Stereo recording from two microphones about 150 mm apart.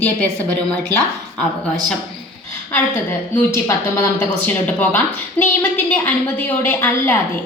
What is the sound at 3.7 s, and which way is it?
A woman's voice, 15° left (ahead or behind).